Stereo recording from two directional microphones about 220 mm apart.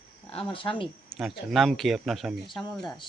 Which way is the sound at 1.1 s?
Centre (ahead or behind).